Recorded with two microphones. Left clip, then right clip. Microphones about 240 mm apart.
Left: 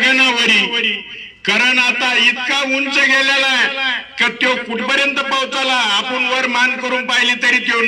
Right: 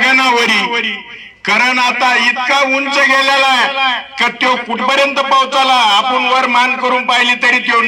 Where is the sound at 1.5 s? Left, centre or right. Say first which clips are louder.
Right 2 dB; centre.